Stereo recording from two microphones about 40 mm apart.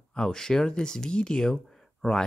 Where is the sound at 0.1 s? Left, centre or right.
Centre.